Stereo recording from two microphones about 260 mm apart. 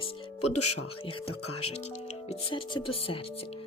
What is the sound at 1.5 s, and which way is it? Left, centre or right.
Music, left.